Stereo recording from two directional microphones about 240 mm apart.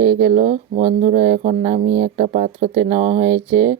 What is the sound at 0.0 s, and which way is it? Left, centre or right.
Speech, right.